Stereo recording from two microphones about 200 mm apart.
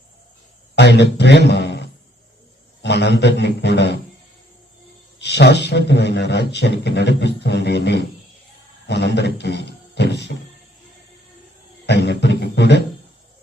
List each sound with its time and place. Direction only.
0.8 s a sound: 60° left (ahead or behind)
1.1 s speech: 60° left (ahead or behind)
5.2 s speech: 55° left (ahead or behind)
11.9 s speech: 60° left (ahead or behind)